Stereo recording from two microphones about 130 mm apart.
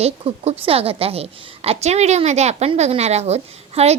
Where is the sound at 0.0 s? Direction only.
50° right (ahead or behind).